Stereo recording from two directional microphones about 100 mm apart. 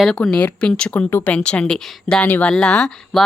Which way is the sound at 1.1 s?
25° left (ahead or behind).